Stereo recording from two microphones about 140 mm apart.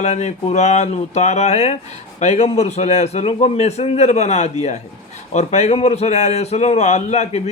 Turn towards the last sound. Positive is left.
turn(degrees=55)  # may be behind; listen again after turning